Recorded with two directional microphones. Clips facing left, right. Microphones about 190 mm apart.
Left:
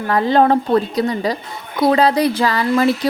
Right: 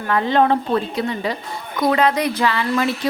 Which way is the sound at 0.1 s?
35° left (ahead or behind).